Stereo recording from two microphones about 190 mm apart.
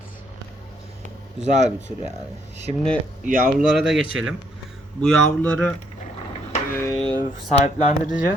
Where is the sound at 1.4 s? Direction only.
40° right (ahead or behind).